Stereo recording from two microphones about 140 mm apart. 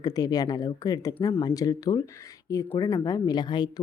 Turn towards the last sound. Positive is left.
turn(degrees=30)  # may be behind; listen again after turning